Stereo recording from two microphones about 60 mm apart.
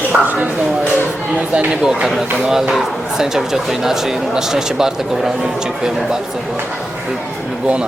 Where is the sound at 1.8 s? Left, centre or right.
Centre.